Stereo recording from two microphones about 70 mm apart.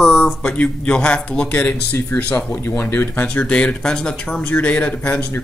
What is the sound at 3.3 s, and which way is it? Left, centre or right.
Speech, centre.